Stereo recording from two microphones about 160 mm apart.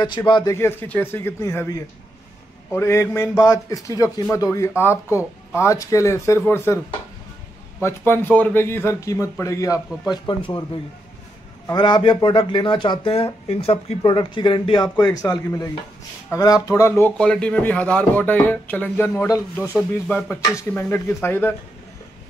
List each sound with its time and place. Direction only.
0.3 s speech: 20° left (ahead or behind)
7.8 s speech: 15° left (ahead or behind); by 10.6 s 30° left (ahead or behind)
11.7 s speech: 30° left (ahead or behind)
17.2 s speech: 5° left (ahead or behind)